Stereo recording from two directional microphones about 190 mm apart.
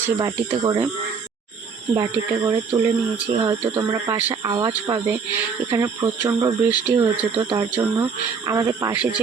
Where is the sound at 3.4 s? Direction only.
20° right (ahead or behind).